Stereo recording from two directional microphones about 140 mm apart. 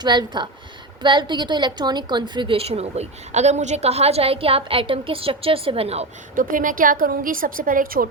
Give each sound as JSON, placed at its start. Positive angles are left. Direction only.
{"t": 0.0, "sound": "a woman's voice", "side_deg": -30}
{"t": 6.3, "sound": "a woman's voice", "side_deg": -75}